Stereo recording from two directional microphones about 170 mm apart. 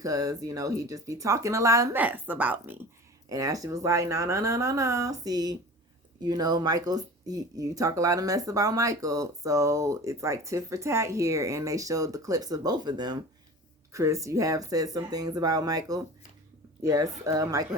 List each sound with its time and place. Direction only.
0.0 s speech: 20° right (ahead or behind)